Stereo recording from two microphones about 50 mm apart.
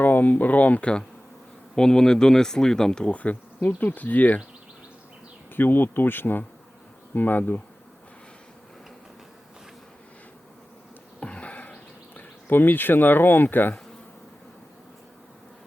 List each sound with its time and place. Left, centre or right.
0.0 s speech: left
1.7 s speech: centre
3.1 s speech: left
5.5 s speech: left
11.2 s a sound: left